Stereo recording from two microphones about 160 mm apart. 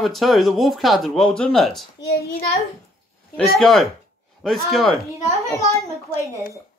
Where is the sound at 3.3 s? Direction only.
Centre (ahead or behind).